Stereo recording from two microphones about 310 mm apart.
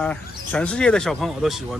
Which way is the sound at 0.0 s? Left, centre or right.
Centre.